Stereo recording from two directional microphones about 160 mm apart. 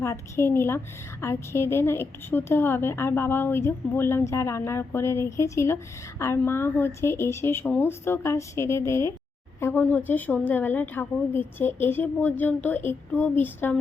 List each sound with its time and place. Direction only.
0.0 s a woman's voice: 15° left (ahead or behind)